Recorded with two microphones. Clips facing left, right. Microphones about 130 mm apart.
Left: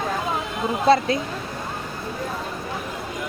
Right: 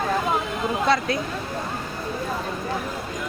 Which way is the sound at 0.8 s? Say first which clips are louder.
Left 6 dB; 30° left (ahead or behind).